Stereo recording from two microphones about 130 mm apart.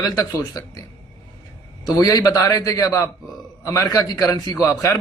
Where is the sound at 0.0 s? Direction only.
30° left (ahead or behind).